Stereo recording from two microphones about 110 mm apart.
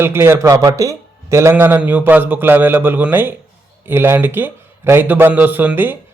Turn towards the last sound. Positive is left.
turn(degrees=-15)  # may be behind; listen again after turning